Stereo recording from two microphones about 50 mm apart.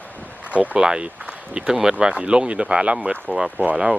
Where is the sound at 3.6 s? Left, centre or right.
Right.